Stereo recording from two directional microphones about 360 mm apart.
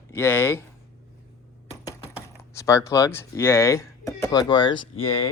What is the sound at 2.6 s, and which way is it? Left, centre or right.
Speech, centre.